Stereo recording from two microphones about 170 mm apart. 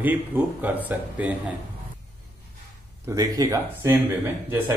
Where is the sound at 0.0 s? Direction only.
10° right (ahead or behind).